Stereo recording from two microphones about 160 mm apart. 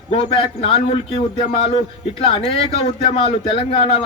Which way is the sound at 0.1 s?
35° left (ahead or behind).